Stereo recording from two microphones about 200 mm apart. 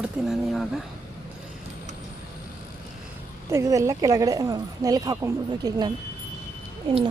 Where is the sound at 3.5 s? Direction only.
15° right (ahead or behind).